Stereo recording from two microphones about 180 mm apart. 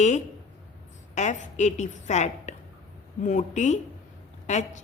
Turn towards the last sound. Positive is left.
turn(degrees=40)  # may be behind; listen again after turning